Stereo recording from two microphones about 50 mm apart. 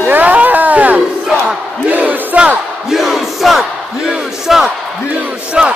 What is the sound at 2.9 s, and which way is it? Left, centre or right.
Crowd, centre.